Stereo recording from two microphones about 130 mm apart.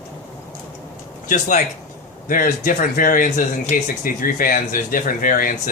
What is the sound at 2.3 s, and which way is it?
Speech, 90° left.